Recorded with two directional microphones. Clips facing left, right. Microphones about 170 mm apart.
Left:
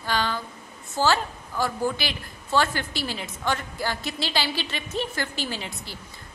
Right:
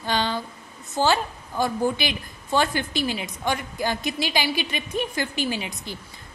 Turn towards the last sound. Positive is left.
turn(degrees=-20)  # may be behind; listen again after turning